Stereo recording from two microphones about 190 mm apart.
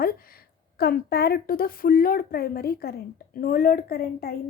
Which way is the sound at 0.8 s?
55° left (ahead or behind).